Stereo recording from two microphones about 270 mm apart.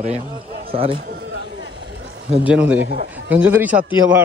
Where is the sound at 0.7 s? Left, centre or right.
Right.